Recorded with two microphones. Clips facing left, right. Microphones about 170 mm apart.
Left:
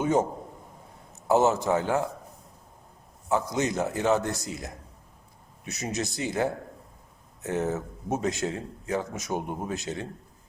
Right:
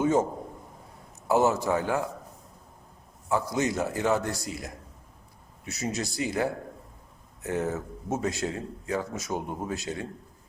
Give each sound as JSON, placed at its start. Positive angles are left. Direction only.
{"t": 0.0, "sound": "a man's voice", "side_deg": 20}
{"t": 1.3, "sound": "speech", "side_deg": 20}
{"t": 3.2, "sound": "speech", "side_deg": 20}